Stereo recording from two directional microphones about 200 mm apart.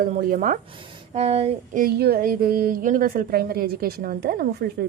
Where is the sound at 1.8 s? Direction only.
50° right (ahead or behind).